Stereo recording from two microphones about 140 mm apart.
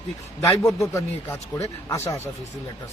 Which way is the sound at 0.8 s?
20° left (ahead or behind).